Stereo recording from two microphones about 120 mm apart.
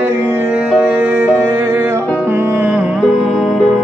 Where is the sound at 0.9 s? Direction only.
20° right (ahead or behind).